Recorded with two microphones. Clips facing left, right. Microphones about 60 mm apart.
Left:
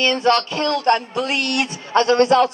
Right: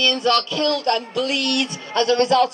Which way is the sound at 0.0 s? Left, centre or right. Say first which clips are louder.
Left 2 dB; left.